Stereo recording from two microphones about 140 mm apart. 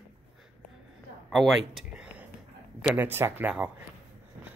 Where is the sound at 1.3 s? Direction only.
Centre (ahead or behind).